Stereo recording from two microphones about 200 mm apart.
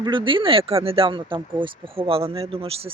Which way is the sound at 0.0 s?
25° right (ahead or behind).